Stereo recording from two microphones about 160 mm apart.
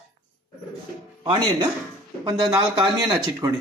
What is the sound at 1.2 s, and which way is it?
Speech, 25° right (ahead or behind).